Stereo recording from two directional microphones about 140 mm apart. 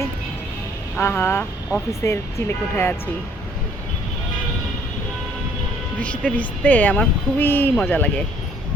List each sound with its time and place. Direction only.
0.9 s speech: 15° left (ahead or behind)
6.0 s speech: 10° left (ahead or behind)